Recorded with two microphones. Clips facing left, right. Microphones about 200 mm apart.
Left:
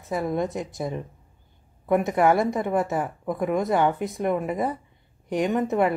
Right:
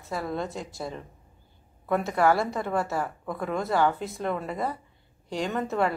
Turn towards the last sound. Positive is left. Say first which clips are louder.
# left 5 dB
turn(degrees=20)  # may be behind; listen again after turning